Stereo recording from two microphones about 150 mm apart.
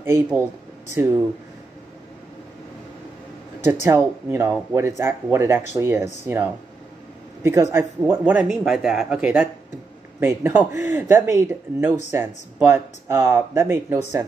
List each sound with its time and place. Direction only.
0.0 s speech: 15° right (ahead or behind)
3.9 s speech: 15° right (ahead or behind)